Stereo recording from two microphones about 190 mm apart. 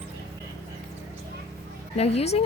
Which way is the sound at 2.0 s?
35° left (ahead or behind).